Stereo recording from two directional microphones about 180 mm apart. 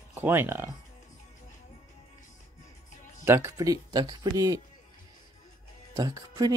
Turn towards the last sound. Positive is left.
turn(degrees=-20)  # may be behind; listen again after turning